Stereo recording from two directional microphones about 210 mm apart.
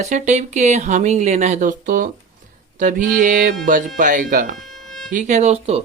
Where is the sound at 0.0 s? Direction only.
35° right (ahead or behind).